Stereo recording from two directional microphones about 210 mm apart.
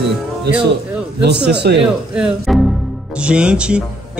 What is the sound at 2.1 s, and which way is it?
Speech, centre (ahead or behind).